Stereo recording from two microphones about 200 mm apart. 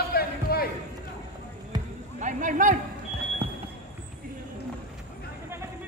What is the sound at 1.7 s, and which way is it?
Basketball bounce, 20° right (ahead or behind).